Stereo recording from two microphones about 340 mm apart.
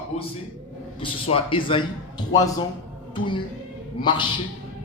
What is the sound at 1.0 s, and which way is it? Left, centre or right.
Speech, centre.